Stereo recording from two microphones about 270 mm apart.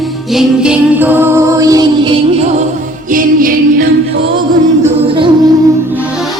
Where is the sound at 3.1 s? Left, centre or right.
Right.